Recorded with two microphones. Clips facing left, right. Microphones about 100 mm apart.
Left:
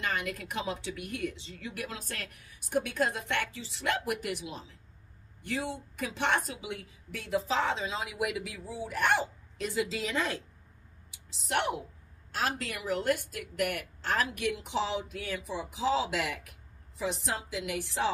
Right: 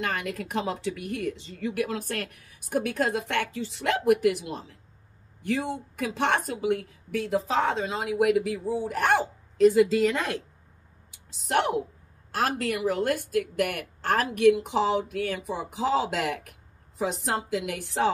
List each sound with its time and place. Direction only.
0.0 s a woman's voice: 45° right (ahead or behind)
11.4 s a woman's voice: 45° right (ahead or behind)